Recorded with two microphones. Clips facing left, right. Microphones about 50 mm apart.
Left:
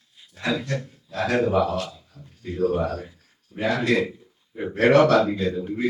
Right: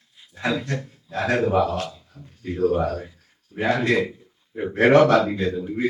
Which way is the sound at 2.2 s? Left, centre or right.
Right.